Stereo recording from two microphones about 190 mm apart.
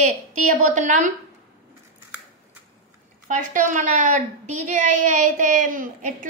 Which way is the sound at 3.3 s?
40° right (ahead or behind).